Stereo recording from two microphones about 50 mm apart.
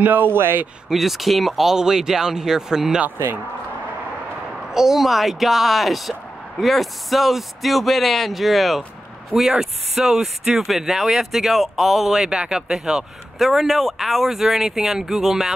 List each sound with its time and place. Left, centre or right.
0.0 s speech: right
0.8 s speech: centre
4.6 s speech: centre